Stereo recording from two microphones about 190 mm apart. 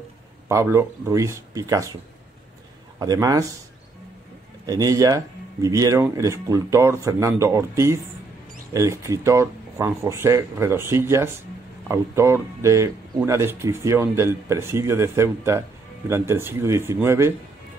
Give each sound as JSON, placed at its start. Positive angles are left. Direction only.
{"t": 0.5, "sound": "speech", "side_deg": -15}
{"t": 3.0, "sound": "a man's voice", "side_deg": -20}
{"t": 4.6, "sound": "speech", "side_deg": -20}